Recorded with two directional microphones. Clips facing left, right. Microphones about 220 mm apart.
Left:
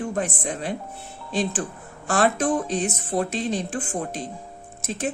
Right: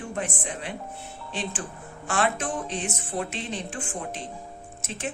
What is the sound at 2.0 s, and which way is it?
Speech, 35° left (ahead or behind).